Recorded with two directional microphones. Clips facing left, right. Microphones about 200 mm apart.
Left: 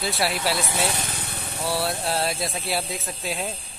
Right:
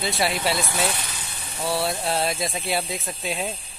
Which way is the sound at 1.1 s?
60° left (ahead or behind).